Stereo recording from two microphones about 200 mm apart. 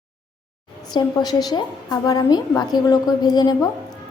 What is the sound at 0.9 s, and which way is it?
A woman's voice, 20° left (ahead or behind).